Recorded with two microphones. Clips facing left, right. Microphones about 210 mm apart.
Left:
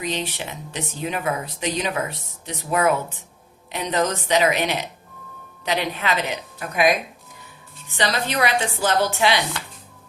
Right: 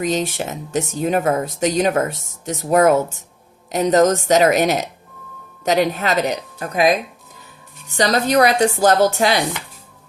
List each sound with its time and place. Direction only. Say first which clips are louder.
0.0 s speech: right 7 dB; 45° right (ahead or behind)